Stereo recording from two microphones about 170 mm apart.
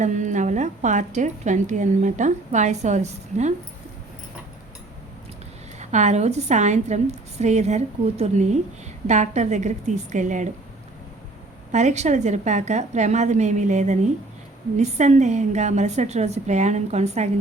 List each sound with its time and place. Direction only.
0.0 s a woman's voice: 45° right (ahead or behind)
5.8 s a woman's voice: 45° right (ahead or behind)
11.7 s a woman's voice: 45° right (ahead or behind)